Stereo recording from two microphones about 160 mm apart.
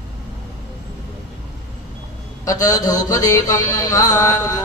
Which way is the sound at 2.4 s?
20° left (ahead or behind).